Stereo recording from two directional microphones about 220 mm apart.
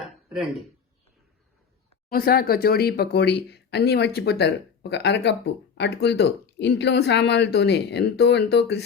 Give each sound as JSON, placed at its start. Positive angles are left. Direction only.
{"t": 0.3, "sound": "speech", "side_deg": 0}
{"t": 2.0, "sound": "speech", "side_deg": 45}